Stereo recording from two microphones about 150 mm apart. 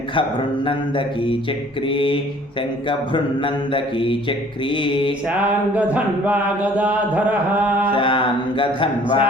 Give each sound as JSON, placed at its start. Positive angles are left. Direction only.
{"t": 0.1, "sound": "mantra", "side_deg": 35}
{"t": 5.3, "sound": "mantra", "side_deg": -10}
{"t": 7.9, "sound": "mantra", "side_deg": 35}